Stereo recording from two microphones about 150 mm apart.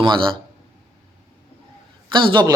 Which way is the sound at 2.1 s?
30° right (ahead or behind).